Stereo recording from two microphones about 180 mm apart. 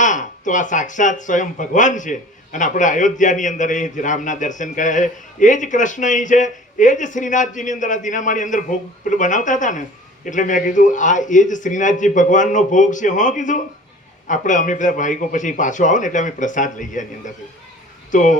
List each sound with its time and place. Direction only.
0.0 s speech: 45° left (ahead or behind)